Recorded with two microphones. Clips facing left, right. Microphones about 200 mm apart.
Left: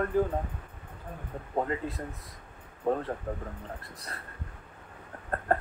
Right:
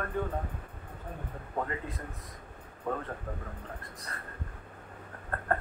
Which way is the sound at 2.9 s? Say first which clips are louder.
Left 6 dB; 30° left (ahead or behind).